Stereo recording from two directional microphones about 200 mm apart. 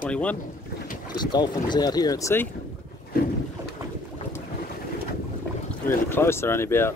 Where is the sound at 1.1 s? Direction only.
20° left (ahead or behind).